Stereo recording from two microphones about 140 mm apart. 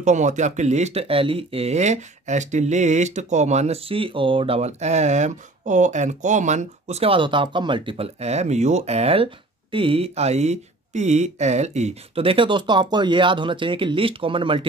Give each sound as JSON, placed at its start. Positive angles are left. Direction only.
{"t": 0.0, "sound": "speech", "side_deg": -60}